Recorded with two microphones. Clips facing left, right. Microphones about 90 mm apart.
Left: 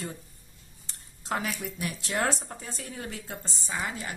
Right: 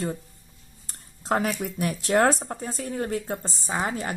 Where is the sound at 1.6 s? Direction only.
45° right (ahead or behind).